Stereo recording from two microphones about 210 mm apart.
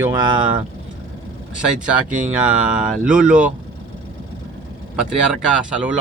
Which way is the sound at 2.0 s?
35° right (ahead or behind).